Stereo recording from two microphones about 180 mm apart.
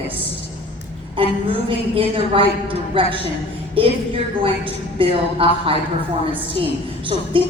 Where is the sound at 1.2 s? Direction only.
30° right (ahead or behind).